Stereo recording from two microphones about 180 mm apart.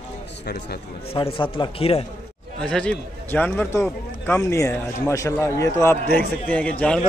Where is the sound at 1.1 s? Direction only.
30° left (ahead or behind).